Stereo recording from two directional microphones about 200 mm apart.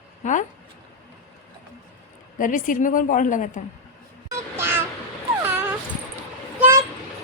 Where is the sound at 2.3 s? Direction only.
40° left (ahead or behind).